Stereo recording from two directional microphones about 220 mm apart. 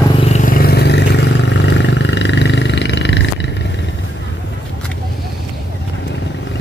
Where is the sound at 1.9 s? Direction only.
55° left (ahead or behind).